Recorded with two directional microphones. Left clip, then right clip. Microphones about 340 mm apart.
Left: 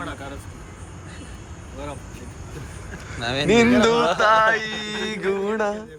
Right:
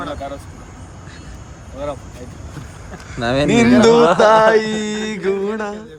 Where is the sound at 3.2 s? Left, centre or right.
Right.